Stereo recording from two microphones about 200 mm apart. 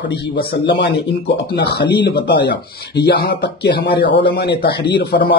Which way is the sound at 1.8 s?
25° left (ahead or behind).